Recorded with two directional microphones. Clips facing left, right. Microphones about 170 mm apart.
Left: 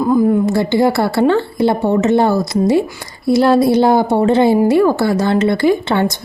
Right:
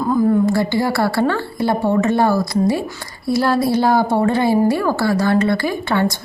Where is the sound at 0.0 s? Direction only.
15° left (ahead or behind).